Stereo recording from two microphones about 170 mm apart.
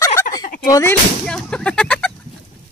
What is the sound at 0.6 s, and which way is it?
Speech, 20° left (ahead or behind).